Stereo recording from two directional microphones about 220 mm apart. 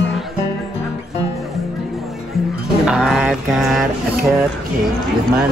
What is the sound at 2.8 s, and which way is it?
Mantra, centre (ahead or behind).